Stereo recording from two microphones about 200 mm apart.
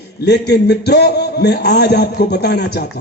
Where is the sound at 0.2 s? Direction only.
55° left (ahead or behind).